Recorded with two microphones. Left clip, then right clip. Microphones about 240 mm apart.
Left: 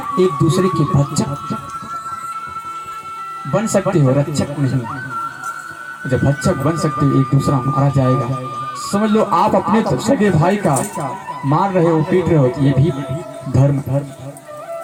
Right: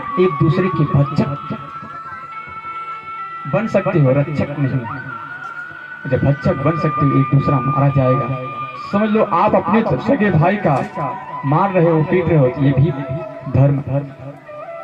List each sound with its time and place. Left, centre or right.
0.2 s speech: left
3.5 s speech: left
6.1 s speech: left